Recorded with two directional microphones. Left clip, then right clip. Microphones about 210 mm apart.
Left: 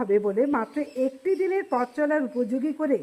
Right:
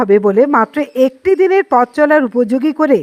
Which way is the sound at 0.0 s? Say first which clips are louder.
Right 13 dB; 35° right (ahead or behind).